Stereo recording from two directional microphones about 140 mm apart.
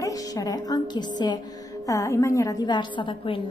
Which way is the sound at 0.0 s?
25° left (ahead or behind).